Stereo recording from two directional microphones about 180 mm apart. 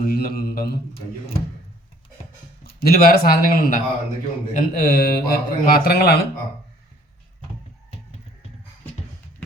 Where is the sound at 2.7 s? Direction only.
55° left (ahead or behind).